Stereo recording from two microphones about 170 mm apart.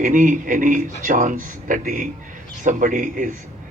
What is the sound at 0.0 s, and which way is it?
A man's voice, 50° right (ahead or behind).